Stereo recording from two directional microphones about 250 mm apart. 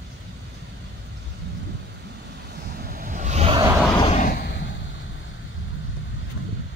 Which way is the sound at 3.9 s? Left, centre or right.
Left.